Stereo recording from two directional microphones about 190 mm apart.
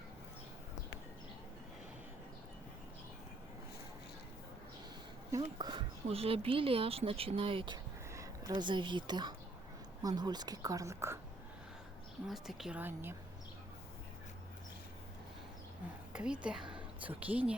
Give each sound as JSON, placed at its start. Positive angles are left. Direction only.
{"t": 5.3, "sound": "a woman's voice", "side_deg": -20}
{"t": 12.3, "sound": "a woman's voice", "side_deg": 0}
{"t": 16.1, "sound": "a woman's voice", "side_deg": -5}